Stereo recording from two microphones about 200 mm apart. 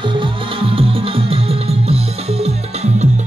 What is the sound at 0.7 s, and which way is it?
Music, 25° right (ahead or behind).